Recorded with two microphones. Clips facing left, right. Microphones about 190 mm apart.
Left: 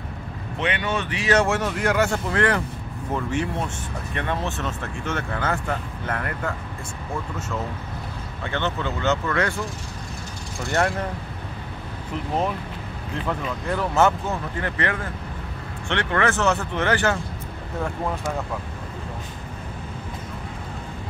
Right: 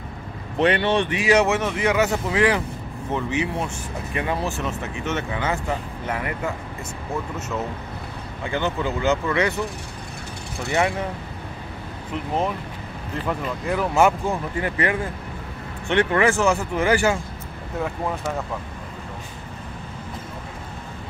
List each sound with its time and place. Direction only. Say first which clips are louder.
0.6 s speech: right 7 dB; 35° right (ahead or behind)
1.1 s speech: left 1 dB; 10° right (ahead or behind)
8.5 s speech: right 2 dB; 10° right (ahead or behind)
10.7 s speech: right 1 dB; 5° right (ahead or behind)
13.3 s speech: right 2 dB; 5° right (ahead or behind)